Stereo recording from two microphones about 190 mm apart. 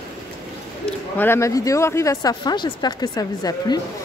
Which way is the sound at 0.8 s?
10° left (ahead or behind).